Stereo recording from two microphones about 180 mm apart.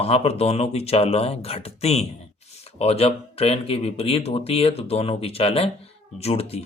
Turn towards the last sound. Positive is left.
turn(degrees=35)  # may be behind; listen again after turning